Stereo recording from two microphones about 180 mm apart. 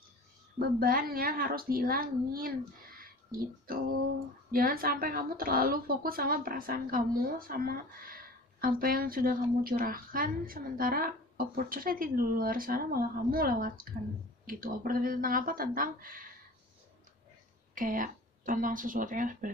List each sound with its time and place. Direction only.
0.6 s speech: 55° right (ahead or behind)
3.0 s music: 55° right (ahead or behind)
4.5 s a woman's voice: 55° right (ahead or behind)
17.7 s a woman's voice: 50° right (ahead or behind)